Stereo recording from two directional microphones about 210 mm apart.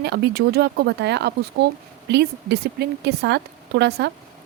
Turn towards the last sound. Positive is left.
turn(degrees=-55)  # may be behind; listen again after turning